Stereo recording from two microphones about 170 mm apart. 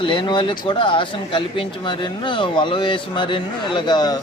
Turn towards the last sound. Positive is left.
turn(degrees=25)  # may be behind; listen again after turning